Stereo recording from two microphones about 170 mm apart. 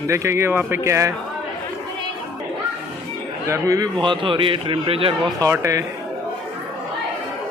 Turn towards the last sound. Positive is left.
turn(degrees=-15)  # may be behind; listen again after turning